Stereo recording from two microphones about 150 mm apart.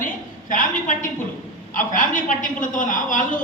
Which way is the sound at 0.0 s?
60° left (ahead or behind).